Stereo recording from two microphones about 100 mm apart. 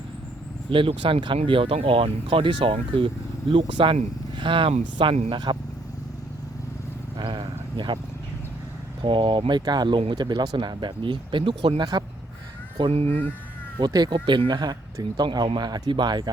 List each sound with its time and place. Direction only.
0.7 s speech: 60° right (ahead or behind); by 5.4 s 75° right (ahead or behind)
7.2 s speech: 55° right (ahead or behind)
9.0 s speech: 55° right (ahead or behind)
9.5 s speech: 45° right (ahead or behind)
12.9 s speech: 90° right
13.7 s speech: 45° right (ahead or behind)